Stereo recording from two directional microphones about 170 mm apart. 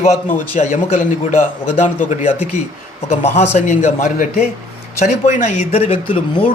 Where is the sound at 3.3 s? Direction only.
40° left (ahead or behind).